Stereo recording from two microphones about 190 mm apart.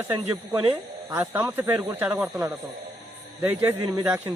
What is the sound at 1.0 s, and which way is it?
Speech, 15° right (ahead or behind).